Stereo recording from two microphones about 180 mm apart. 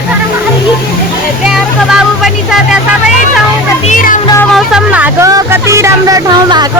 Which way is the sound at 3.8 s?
45° left (ahead or behind).